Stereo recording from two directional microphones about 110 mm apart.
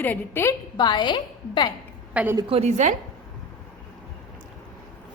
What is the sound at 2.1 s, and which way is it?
Speech, 15° right (ahead or behind).